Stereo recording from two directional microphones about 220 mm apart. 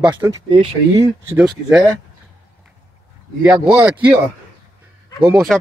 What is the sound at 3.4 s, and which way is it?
Speech, 5° right (ahead or behind).